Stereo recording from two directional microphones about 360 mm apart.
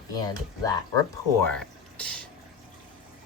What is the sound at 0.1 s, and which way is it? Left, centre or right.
Speech, centre.